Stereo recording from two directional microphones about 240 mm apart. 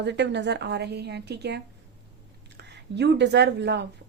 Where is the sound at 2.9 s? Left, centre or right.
Right.